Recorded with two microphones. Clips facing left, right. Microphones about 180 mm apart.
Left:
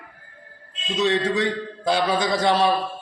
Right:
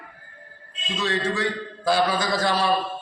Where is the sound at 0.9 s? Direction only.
20° left (ahead or behind).